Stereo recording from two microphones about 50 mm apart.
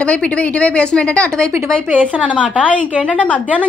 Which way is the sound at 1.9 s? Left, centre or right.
Right.